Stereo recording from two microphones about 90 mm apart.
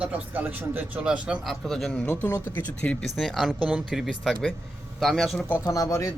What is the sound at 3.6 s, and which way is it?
Speech, 10° right (ahead or behind).